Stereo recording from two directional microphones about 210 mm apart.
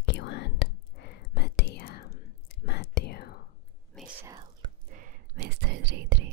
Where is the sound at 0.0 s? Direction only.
55° left (ahead or behind).